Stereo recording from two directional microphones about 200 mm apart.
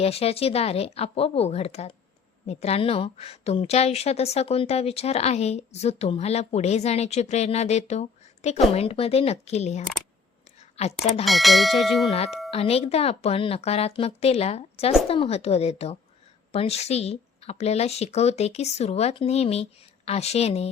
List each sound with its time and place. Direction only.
0.0 s a woman's voice: 30° left (ahead or behind)
11.3 s bell: centre (ahead or behind)
12.5 s a woman's voice: 30° left (ahead or behind)